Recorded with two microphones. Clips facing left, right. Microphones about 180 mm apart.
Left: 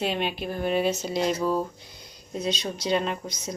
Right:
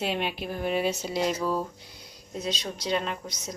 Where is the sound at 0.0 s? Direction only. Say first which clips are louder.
Left 2 dB; 5° right (ahead or behind).